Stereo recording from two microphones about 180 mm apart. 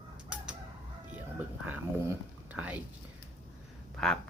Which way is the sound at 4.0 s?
5° left (ahead or behind).